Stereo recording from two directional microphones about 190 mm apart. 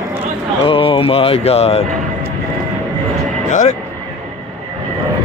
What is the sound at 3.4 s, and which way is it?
Speech, 40° left (ahead or behind).